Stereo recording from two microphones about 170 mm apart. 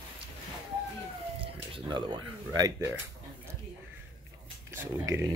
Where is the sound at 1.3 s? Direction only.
30° right (ahead or behind).